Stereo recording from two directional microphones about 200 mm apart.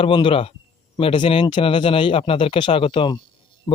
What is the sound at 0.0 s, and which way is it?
Speech, 25° left (ahead or behind).